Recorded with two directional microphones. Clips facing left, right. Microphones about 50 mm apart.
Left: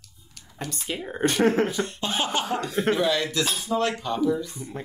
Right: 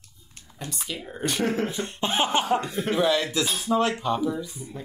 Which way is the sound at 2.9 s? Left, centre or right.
Centre.